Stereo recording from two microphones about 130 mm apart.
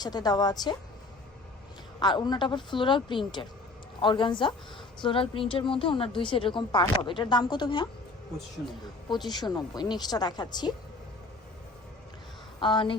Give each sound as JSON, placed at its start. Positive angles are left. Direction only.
{"t": 0.0, "sound": "a woman's voice", "side_deg": 30}
{"t": 2.0, "sound": "a woman's voice", "side_deg": 35}
{"t": 9.0, "sound": "a woman's voice", "side_deg": 35}
{"t": 12.5, "sound": "speech", "side_deg": 40}